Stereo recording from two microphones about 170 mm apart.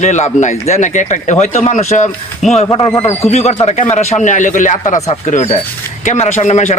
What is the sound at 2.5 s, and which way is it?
Speech, 35° left (ahead or behind).